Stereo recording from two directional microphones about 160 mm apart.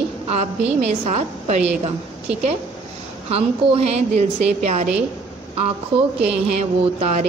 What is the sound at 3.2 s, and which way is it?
A woman's voice, 35° right (ahead or behind).